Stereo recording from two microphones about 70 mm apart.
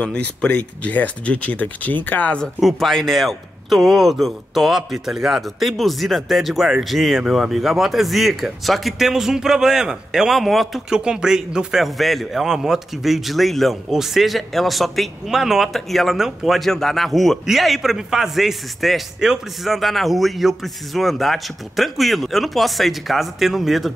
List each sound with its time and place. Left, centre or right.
0.0 s speech: centre
2.6 s a man's voice: centre
10.9 s a man's voice: centre